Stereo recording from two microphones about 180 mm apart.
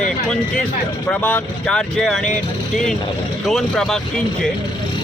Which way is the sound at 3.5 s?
Centre (ahead or behind).